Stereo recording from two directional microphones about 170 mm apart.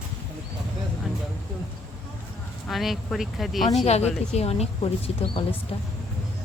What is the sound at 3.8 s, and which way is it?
Speech, 40° left (ahead or behind).